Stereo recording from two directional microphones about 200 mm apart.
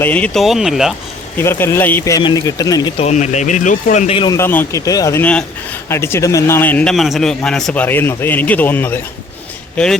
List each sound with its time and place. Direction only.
0.0 s speech: 5° left (ahead or behind)
1.4 s a man's voice: 10° left (ahead or behind)
3.0 s speech: 35° left (ahead or behind)
4.4 s a man's voice: 10° left (ahead or behind)